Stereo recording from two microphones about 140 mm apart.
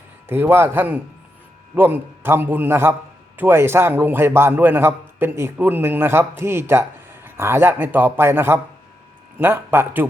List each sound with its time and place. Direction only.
0.3 s a man's voice: 15° right (ahead or behind)